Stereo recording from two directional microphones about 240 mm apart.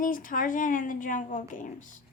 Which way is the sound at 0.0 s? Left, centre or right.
Left.